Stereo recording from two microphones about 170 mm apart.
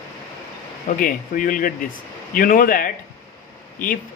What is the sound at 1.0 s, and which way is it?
A man's voice, 55° left (ahead or behind).